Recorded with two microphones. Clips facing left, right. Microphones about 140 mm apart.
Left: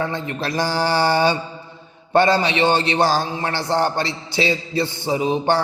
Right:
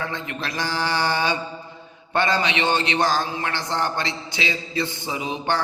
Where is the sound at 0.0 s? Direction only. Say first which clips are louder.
Left 5 dB; 35° left (ahead or behind).